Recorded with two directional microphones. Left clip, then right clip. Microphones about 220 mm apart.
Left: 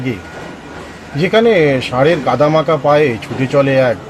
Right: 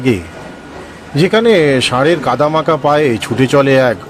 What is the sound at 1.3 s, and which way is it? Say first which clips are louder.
Speech: even; 25° right (ahead or behind).